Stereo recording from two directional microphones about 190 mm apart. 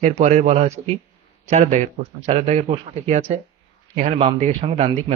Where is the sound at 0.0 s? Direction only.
40° right (ahead or behind).